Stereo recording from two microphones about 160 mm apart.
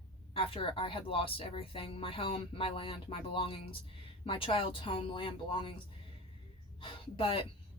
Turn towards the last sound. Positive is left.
turn(degrees=35)  # may be behind; listen again after turning